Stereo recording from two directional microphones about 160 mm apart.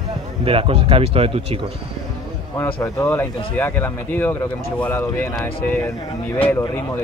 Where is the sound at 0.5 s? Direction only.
35° right (ahead or behind).